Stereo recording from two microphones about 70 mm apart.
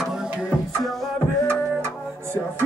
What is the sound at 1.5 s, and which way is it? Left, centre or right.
Music, right.